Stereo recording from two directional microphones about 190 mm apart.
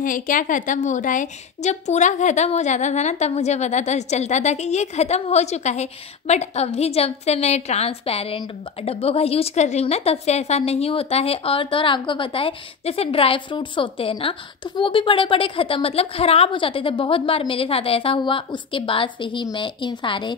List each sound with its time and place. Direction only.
0.0 s a woman's voice: 45° left (ahead or behind); by 20.3 s 25° left (ahead or behind)